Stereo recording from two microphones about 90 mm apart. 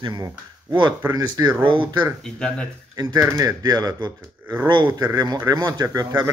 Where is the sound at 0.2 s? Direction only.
55° right (ahead or behind).